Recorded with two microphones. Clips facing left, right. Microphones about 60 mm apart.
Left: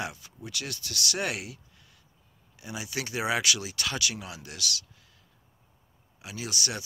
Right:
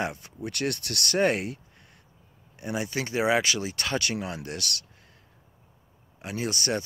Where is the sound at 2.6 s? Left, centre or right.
Right.